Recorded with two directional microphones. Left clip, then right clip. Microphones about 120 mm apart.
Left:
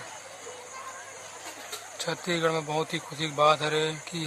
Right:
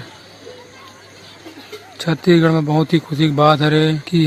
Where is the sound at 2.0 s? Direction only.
45° right (ahead or behind).